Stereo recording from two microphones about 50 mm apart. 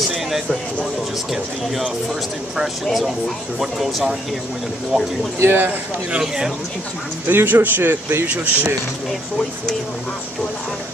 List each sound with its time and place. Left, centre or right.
2.8 s speech: centre
5.4 s speech: right
6.2 s speech: centre
7.2 s speech: right